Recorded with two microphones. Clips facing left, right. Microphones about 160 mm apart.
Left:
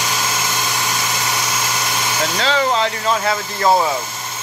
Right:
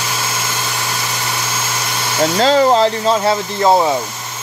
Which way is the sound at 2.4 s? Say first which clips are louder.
Right 7 dB; 40° right (ahead or behind).